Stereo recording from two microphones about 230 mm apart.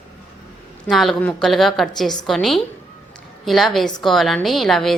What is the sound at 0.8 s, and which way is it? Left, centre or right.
A woman's voice, centre.